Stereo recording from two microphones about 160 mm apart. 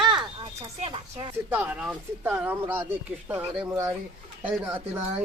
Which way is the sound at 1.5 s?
10° right (ahead or behind).